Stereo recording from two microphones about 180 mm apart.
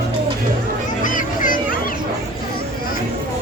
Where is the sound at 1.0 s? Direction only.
50° left (ahead or behind).